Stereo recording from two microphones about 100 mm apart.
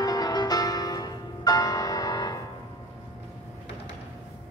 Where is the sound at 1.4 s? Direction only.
40° left (ahead or behind).